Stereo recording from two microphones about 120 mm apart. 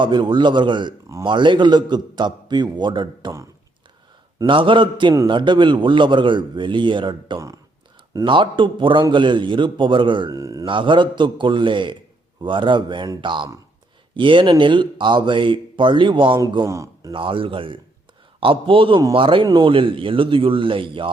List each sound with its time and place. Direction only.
0.0 s a man's voice: 40° right (ahead or behind)
4.4 s a man's voice: 45° right (ahead or behind)
10.3 s a man's voice: 30° right (ahead or behind)
10.7 s a man's voice: 40° right (ahead or behind)
16.6 s speech: 25° right (ahead or behind)
17.1 s speech: 45° right (ahead or behind)